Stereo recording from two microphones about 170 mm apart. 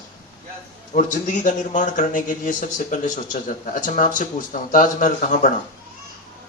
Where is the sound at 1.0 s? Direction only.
50° left (ahead or behind).